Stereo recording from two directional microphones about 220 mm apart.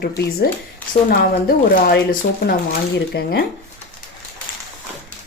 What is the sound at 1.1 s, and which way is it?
A woman's voice, 45° left (ahead or behind).